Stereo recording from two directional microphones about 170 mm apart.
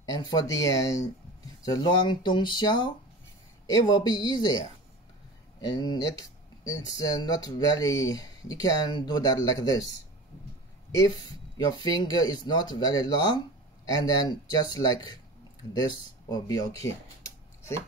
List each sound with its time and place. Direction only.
0.0 s speech: 25° left (ahead or behind)
5.6 s speech: 25° left (ahead or behind)
11.5 s speech: 20° left (ahead or behind)
16.3 s speech: 20° left (ahead or behind)